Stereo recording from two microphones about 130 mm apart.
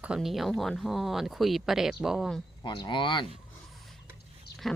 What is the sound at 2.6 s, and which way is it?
Speech, 35° left (ahead or behind).